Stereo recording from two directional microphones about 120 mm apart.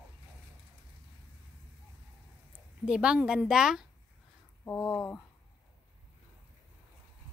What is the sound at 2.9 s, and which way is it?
Speech, 10° right (ahead or behind).